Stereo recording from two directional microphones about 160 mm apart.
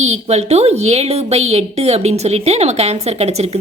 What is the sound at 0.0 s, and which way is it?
A woman's voice, 45° right (ahead or behind).